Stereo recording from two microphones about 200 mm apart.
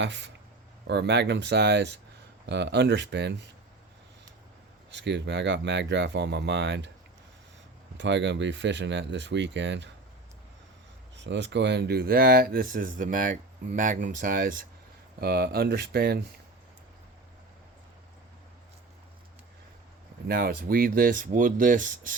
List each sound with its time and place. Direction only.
0.0 s speech: 65° right (ahead or behind)
4.9 s speech: 60° right (ahead or behind)
7.9 s speech: 60° right (ahead or behind)
11.2 s speech: 65° right (ahead or behind)
20.2 s speech: 50° right (ahead or behind)